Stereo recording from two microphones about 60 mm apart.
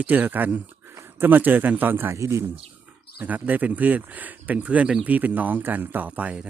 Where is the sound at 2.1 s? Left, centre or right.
Right.